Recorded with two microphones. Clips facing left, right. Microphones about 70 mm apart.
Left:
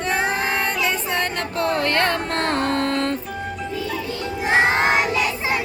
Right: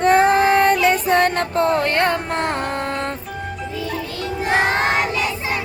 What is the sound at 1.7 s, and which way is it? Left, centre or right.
Music, centre.